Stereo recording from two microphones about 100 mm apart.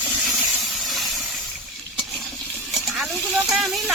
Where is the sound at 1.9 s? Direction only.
Centre (ahead or behind).